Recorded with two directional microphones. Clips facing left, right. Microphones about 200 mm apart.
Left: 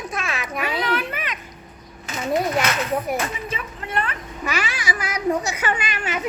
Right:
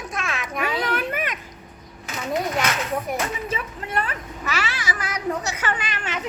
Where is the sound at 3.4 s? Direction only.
40° right (ahead or behind).